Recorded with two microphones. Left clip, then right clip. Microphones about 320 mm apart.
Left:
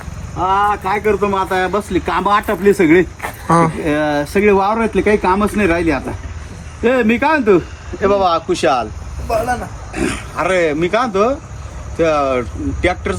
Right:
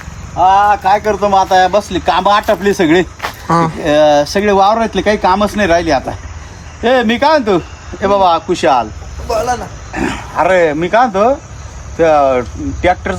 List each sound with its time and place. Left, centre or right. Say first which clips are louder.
0.3 s speech: right 6 dB; centre
3.2 s speech: right 1 dB; centre
8.0 s speech: right 3 dB; right